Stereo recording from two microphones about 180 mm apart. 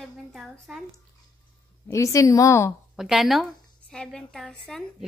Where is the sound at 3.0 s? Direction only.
Centre (ahead or behind).